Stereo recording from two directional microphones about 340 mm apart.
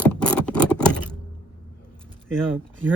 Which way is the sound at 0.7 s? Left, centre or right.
Centre.